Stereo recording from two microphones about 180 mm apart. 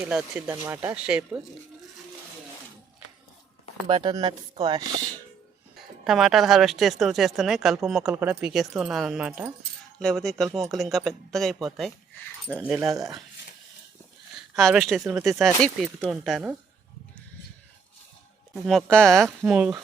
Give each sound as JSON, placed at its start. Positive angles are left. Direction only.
{"t": 0.0, "sound": "speech", "side_deg": -5}
{"t": 3.8, "sound": "speech", "side_deg": -25}
{"t": 5.7, "sound": "a woman's voice", "side_deg": 0}
{"t": 14.5, "sound": "a woman's voice", "side_deg": 0}
{"t": 18.5, "sound": "a woman's voice", "side_deg": 0}